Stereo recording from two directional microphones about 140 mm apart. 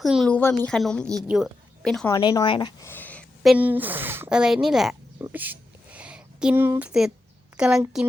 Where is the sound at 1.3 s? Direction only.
10° right (ahead or behind).